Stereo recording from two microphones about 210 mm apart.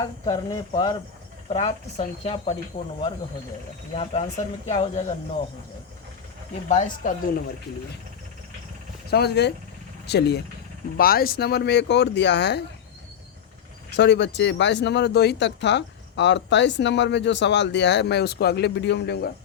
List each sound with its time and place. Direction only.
0.0 s speech: 20° left (ahead or behind)
3.9 s speech: 30° left (ahead or behind)
6.7 s speech: 35° left (ahead or behind)
9.0 s speech: 50° left (ahead or behind)
13.9 s speech: 55° left (ahead or behind)